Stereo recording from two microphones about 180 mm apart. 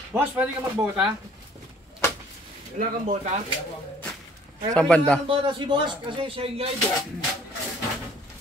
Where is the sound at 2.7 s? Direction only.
45° right (ahead or behind).